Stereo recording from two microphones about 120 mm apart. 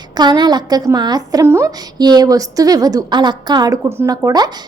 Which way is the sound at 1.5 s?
20° right (ahead or behind).